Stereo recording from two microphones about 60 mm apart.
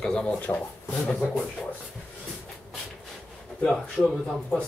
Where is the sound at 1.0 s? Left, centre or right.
Left.